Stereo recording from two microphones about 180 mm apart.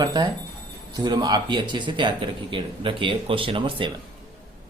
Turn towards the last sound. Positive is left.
turn(degrees=-25)  # may be behind; listen again after turning